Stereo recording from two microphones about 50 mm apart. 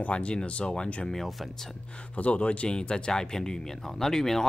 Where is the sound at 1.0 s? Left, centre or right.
Centre.